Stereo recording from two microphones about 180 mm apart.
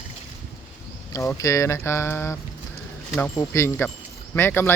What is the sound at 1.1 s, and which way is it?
Speech, 15° left (ahead or behind).